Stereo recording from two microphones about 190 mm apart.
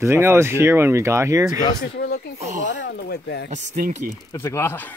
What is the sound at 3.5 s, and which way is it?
Speech, 40° right (ahead or behind).